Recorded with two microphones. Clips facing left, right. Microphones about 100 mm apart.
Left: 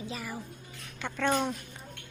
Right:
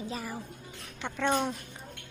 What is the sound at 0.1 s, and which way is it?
Speech, 35° right (ahead or behind).